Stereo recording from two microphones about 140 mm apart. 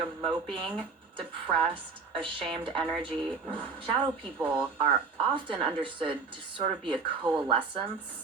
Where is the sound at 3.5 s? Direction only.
40° right (ahead or behind).